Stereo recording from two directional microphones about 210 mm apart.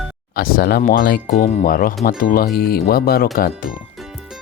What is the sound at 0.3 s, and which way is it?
Speech, 45° left (ahead or behind).